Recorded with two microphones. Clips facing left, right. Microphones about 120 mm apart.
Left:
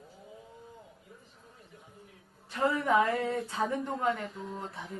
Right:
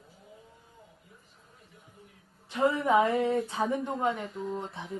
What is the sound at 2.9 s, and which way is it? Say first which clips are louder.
Speech: right 2 dB; 25° right (ahead or behind).